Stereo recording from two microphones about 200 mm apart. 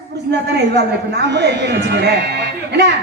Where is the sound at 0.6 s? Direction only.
55° right (ahead or behind).